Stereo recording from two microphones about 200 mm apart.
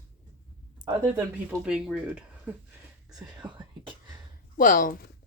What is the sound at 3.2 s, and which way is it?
Speech, 20° right (ahead or behind).